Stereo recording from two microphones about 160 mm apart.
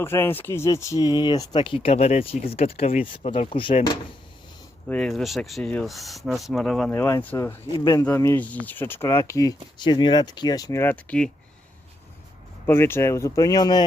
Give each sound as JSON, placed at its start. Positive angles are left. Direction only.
{"t": 0.0, "sound": "speech", "side_deg": 15}
{"t": 4.9, "sound": "speech", "side_deg": 5}
{"t": 6.9, "sound": "speech", "side_deg": 15}
{"t": 12.6, "sound": "speech", "side_deg": 15}